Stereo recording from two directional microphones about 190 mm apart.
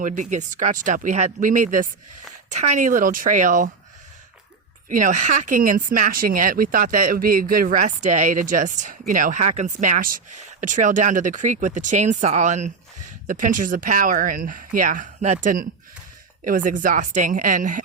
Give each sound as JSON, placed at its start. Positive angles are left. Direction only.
{"t": 0.0, "sound": "speech", "side_deg": -40}
{"t": 4.9, "sound": "speech", "side_deg": -45}